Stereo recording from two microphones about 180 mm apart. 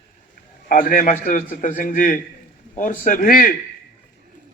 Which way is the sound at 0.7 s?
50° left (ahead or behind).